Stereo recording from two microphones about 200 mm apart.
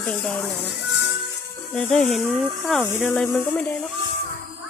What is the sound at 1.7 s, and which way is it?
Speech, 5° left (ahead or behind).